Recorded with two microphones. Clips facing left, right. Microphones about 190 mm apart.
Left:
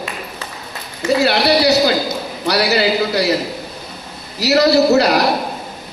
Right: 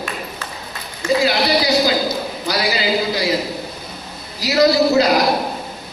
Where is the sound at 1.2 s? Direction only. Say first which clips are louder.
Left 6 dB; 70° left (ahead or behind).